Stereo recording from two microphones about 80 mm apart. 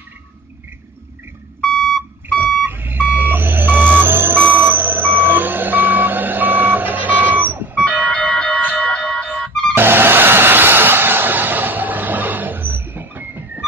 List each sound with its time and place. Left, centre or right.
2.4 s reversing beeps: right
7.8 s music: centre
9.8 s a sound: right